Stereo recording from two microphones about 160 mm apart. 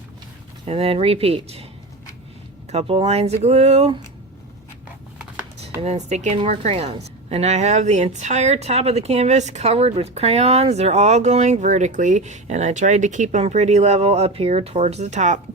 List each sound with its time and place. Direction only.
0.7 s speech: 40° right (ahead or behind)
2.7 s speech: 40° right (ahead or behind)
5.8 s a woman's voice: 45° right (ahead or behind)